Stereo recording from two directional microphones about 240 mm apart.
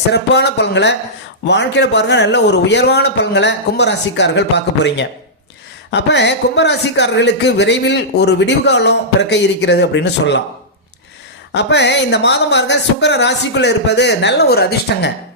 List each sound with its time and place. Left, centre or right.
0.1 s a man's voice: left
11.5 s a man's voice: left